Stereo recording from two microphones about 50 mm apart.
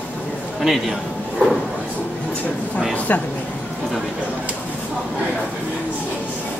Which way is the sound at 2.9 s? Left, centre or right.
Left.